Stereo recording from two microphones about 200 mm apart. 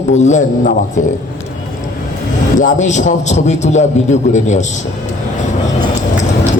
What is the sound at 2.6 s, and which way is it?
A man's voice, 40° left (ahead or behind).